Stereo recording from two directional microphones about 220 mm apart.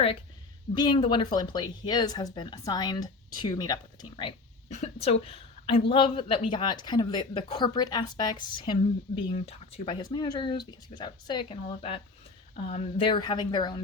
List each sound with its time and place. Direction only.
0.7 s speech: 20° left (ahead or behind)
5.2 s a sound: 25° left (ahead or behind)
5.9 s speech: 25° left (ahead or behind)